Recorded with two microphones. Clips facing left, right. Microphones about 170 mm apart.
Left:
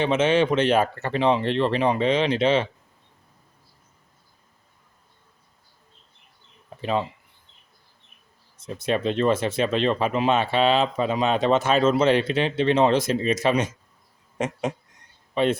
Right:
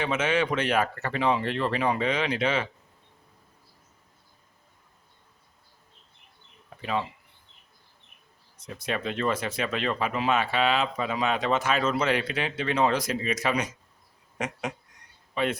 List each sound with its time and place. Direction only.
0.0 s speech: 25° left (ahead or behind)
8.5 s speech: 25° left (ahead or behind)